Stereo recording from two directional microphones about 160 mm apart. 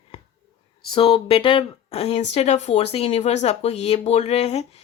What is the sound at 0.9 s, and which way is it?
Speech, 35° left (ahead or behind).